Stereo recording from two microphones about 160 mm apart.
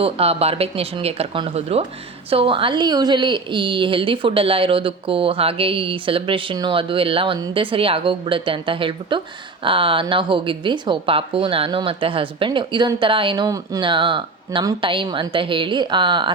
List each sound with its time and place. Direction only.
0.0 s a woman's voice: 40° right (ahead or behind)